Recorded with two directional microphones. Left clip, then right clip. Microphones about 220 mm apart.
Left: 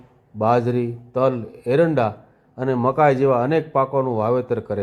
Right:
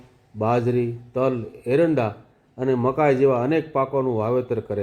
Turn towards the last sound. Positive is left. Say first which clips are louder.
# left 2 dB
turn(degrees=20)  # may be behind; listen again after turning